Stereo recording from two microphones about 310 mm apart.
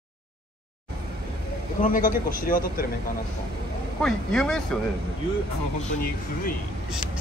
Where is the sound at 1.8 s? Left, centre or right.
Left.